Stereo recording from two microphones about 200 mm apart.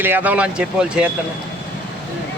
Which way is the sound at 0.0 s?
10° right (ahead or behind).